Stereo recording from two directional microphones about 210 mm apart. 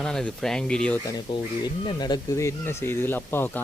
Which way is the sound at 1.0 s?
20° left (ahead or behind).